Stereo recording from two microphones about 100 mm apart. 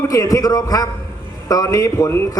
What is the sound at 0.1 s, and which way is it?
A man's voice, 35° left (ahead or behind).